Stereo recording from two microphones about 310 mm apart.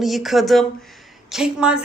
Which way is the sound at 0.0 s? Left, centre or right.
Centre.